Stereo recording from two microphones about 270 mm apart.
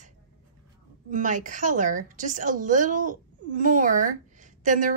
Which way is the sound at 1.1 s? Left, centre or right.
Right.